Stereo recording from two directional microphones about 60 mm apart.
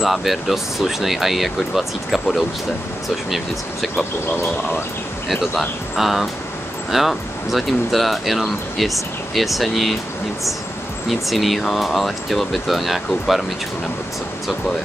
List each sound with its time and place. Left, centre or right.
0.0 s speech: centre
5.3 s speech: centre
11.1 s speech: centre